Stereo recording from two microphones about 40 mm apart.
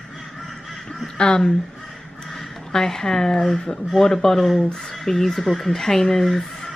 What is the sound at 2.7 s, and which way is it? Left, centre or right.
A woman's voice, centre.